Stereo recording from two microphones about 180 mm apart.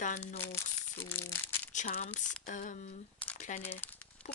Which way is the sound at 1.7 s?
40° left (ahead or behind).